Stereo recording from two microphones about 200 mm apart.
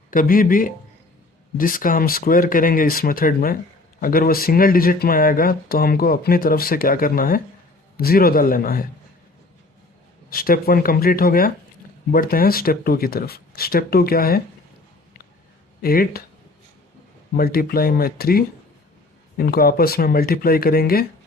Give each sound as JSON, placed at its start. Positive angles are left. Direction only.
{"t": 0.1, "sound": "speech", "side_deg": 45}
{"t": 10.2, "sound": "speech", "side_deg": 45}
{"t": 15.8, "sound": "speech", "side_deg": 50}
{"t": 17.3, "sound": "speech", "side_deg": 50}